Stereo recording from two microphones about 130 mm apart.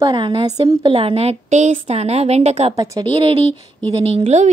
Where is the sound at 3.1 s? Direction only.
45° right (ahead or behind); by 4.5 s 60° right (ahead or behind).